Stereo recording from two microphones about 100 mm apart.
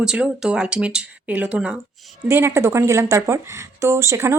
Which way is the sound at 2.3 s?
25° right (ahead or behind).